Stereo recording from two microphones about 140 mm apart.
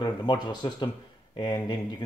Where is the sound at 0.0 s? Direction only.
30° left (ahead or behind).